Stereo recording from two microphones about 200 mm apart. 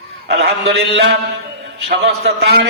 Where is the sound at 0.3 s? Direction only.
60° right (ahead or behind).